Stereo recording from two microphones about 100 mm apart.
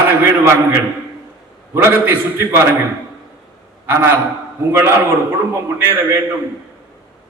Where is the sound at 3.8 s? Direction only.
25° right (ahead or behind).